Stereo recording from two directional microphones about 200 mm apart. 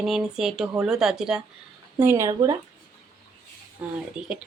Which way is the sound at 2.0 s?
15° right (ahead or behind).